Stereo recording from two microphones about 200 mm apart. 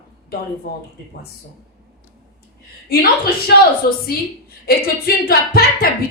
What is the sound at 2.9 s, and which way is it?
A woman's voice, 50° left (ahead or behind).